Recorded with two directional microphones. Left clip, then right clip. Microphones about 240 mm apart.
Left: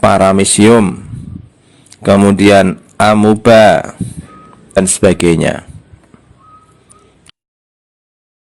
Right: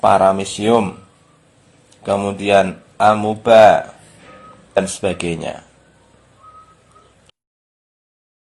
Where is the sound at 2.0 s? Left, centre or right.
Left.